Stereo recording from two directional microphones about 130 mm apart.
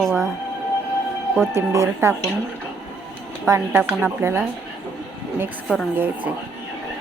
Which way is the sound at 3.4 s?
20° right (ahead or behind).